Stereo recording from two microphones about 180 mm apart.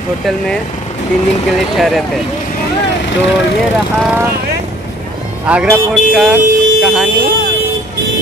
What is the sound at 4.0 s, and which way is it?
Speech, 10° right (ahead or behind).